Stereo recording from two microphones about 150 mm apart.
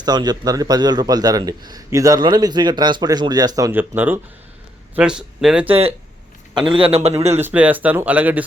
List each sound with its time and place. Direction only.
0.0 s a man's voice: 25° right (ahead or behind); by 5.6 s 5° right (ahead or behind)
5.6 s speech: 40° right (ahead or behind)
6.5 s a man's voice: 30° right (ahead or behind)
7.3 s speech: 10° right (ahead or behind)